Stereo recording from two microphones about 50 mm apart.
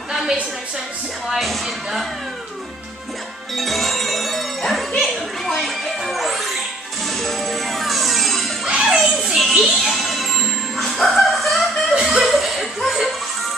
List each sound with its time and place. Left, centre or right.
1.3 s speech: centre
3.5 s music: centre
4.9 s children playing: centre
5.6 s music: centre
8.6 s music: centre
8.9 s music: centre
11.9 s chuckle: centre